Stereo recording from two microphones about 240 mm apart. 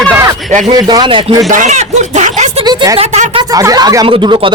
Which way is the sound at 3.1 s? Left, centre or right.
Right.